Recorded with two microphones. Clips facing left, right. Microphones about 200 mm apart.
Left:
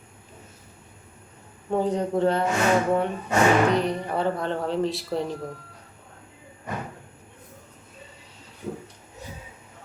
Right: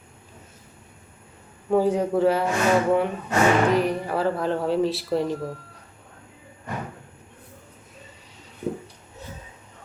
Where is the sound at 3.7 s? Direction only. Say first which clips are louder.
Right 2 dB; 5° right (ahead or behind).